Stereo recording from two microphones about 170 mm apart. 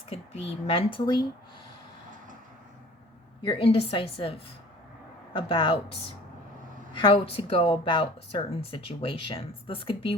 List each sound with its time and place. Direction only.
0.1 s speech: 35° left (ahead or behind)
3.4 s speech: 30° left (ahead or behind)
6.9 s speech: 30° left (ahead or behind)